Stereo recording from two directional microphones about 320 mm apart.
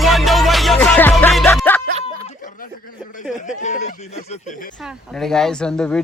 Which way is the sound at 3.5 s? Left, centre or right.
Left.